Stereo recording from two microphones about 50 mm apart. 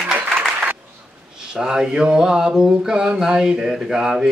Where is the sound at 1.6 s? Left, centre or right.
Centre.